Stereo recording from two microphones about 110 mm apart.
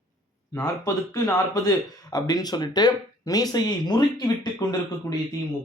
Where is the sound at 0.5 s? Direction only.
30° left (ahead or behind).